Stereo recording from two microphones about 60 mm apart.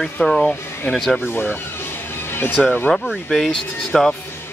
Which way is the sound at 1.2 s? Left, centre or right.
Left.